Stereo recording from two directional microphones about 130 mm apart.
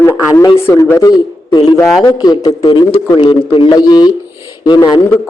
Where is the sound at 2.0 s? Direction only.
35° left (ahead or behind).